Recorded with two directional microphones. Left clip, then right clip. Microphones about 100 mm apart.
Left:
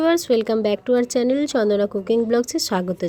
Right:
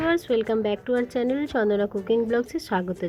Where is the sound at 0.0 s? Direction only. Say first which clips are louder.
Left 5 dB; 35° left (ahead or behind).